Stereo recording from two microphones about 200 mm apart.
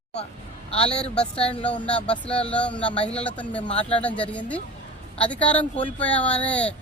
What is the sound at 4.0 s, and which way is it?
A man's voice, 5° left (ahead or behind).